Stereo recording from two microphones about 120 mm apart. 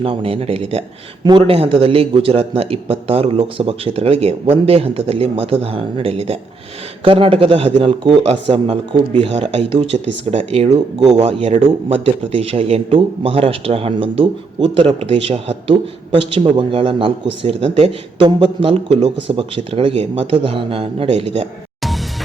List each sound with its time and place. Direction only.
0.0 s a man's voice: 50° right (ahead or behind)
1.2 s a man's voice: 40° right (ahead or behind)
15.7 s a man's voice: 45° right (ahead or behind)